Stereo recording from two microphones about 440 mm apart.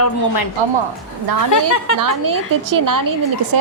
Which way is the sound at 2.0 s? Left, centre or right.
Right.